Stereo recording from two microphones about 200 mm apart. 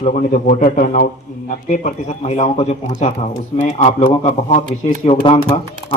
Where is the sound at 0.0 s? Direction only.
35° left (ahead or behind).